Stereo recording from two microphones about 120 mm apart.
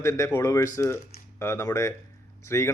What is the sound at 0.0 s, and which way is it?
Speech, 25° left (ahead or behind).